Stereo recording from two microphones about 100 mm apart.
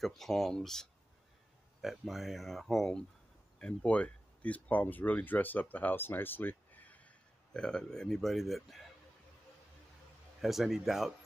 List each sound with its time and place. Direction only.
0.0 s speech: 5° left (ahead or behind)
10.4 s speech: centre (ahead or behind)